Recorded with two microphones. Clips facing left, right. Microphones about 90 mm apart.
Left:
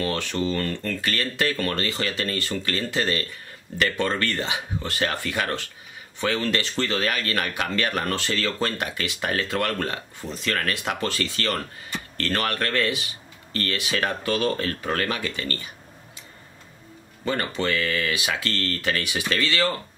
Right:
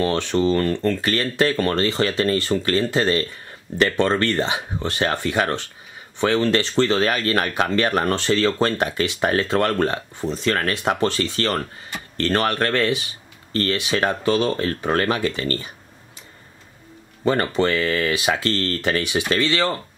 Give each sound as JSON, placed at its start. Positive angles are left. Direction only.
{"t": 0.0, "sound": "speech", "side_deg": -30}
{"t": 17.2, "sound": "speech", "side_deg": -35}